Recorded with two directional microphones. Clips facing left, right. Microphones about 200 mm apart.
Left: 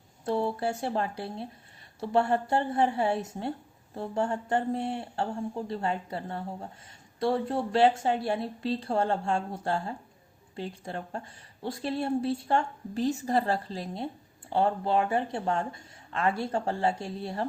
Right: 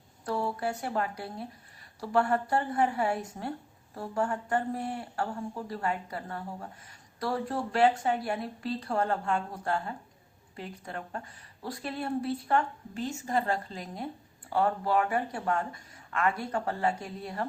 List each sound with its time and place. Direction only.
0.3 s speech: 25° left (ahead or behind)